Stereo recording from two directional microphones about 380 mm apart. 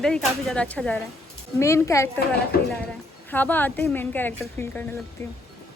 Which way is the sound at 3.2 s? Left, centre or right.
Centre.